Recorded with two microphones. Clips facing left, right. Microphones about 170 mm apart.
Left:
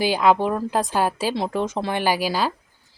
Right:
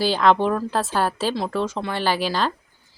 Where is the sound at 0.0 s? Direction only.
10° left (ahead or behind).